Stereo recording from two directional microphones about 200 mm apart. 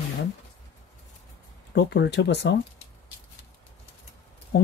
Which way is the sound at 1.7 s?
60° left (ahead or behind).